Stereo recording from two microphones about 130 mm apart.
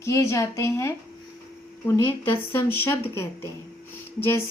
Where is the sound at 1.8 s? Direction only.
20° left (ahead or behind).